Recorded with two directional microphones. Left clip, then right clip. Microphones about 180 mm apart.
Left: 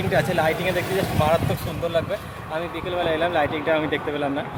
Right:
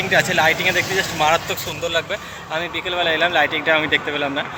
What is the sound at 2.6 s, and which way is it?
Speech, 5° left (ahead or behind).